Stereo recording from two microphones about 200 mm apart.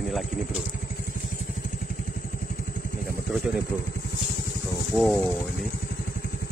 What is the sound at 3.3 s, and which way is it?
Speech, centre (ahead or behind).